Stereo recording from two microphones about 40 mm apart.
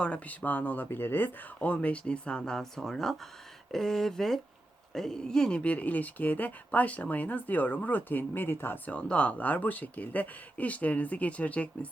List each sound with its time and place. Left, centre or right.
0.0 s speech: left
0.4 s speech: left
1.6 s speech: left
2.4 s speech: centre
5.7 s speech: left
8.3 s speech: left
8.9 s speech: left